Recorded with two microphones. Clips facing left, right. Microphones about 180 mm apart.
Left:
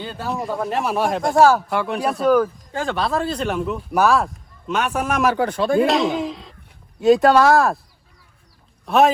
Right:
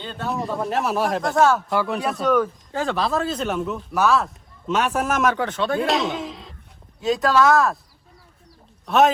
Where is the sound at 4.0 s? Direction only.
55° left (ahead or behind).